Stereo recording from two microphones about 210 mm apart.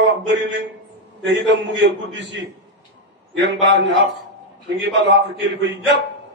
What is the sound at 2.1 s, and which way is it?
A man's voice, 60° right (ahead or behind).